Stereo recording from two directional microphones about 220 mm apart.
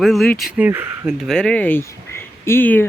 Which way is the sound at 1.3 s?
5° left (ahead or behind).